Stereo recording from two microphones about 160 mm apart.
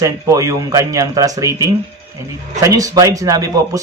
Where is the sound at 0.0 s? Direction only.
20° right (ahead or behind).